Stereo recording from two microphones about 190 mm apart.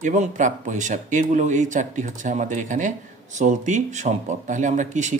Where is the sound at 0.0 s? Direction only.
40° right (ahead or behind).